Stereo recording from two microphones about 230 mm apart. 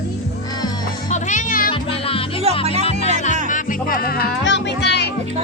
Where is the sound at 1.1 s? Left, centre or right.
Left.